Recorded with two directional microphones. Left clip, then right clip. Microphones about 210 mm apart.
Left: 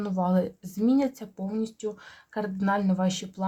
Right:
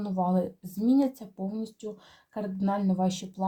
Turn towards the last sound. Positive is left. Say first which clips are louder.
# even
turn(degrees=35)  # may be behind; listen again after turning